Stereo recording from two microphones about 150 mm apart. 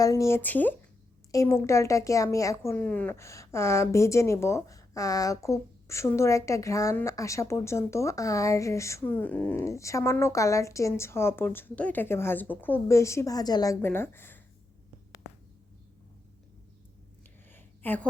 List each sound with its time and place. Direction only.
0.0 s speech: 20° left (ahead or behind)
2.7 s speech: 10° left (ahead or behind); by 13.7 s 25° left (ahead or behind)
13.8 s speech: 15° left (ahead or behind)
17.5 s a sound: 10° left (ahead or behind)